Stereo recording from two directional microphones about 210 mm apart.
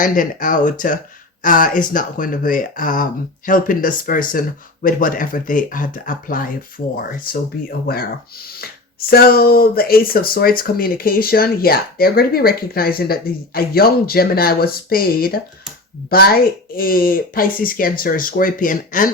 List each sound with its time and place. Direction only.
0.0 s speech: 40° left (ahead or behind)
9.0 s speech: 45° left (ahead or behind)